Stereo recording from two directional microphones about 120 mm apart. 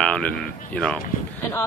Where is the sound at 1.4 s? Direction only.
20° left (ahead or behind).